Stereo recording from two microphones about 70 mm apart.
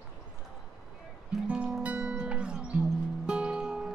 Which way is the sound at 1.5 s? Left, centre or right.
Centre.